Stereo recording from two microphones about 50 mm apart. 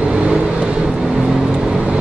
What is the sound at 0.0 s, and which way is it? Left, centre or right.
Vehicle, centre.